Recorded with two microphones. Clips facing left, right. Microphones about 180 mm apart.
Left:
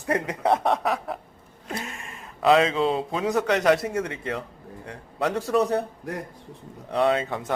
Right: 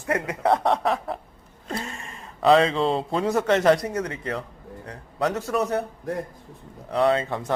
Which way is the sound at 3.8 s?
25° left (ahead or behind).